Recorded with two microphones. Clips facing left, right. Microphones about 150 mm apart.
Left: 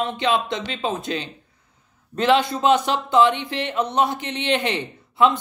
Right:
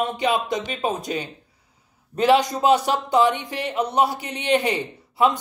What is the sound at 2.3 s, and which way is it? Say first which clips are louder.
Speech: even; 40° right (ahead or behind).